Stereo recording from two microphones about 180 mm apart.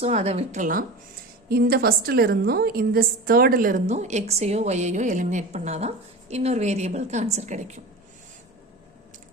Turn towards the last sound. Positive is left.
turn(degrees=-40)  # may be behind; listen again after turning